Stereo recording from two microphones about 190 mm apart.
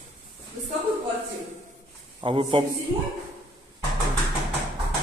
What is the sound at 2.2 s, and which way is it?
Speech, 25° right (ahead or behind).